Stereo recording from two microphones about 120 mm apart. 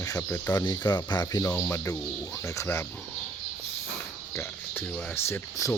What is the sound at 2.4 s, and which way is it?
Speech, 20° left (ahead or behind).